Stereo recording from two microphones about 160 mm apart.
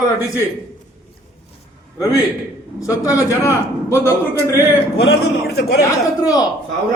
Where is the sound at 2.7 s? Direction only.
20° left (ahead or behind).